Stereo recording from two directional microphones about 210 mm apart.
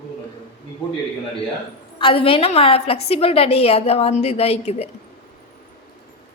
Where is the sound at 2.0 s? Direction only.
25° left (ahead or behind).